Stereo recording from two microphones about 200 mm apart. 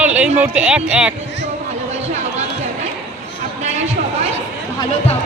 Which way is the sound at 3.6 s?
35° right (ahead or behind).